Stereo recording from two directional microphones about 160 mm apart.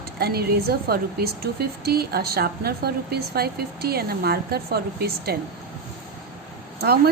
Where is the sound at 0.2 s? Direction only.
80° right.